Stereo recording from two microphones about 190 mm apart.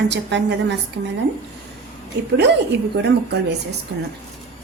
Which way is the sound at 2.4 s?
65° right (ahead or behind).